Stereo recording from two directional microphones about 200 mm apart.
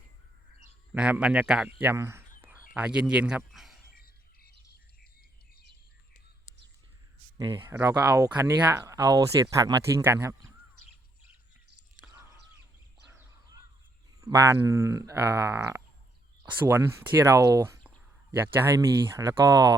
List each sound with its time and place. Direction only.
0.9 s speech: 5° right (ahead or behind)
3.9 s frog: 50° left (ahead or behind)
7.3 s speech: 15° right (ahead or behind)
12.0 s whispering: 10° right (ahead or behind)
13.1 s fowl: 10° right (ahead or behind)
14.2 s speech: 15° right (ahead or behind)